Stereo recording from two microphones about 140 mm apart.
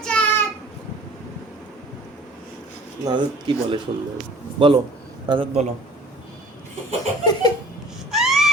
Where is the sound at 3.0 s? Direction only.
35° right (ahead or behind).